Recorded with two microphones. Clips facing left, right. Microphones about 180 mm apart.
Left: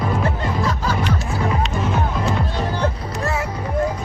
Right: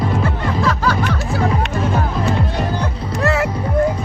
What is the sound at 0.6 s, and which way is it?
Music, 70° right (ahead or behind).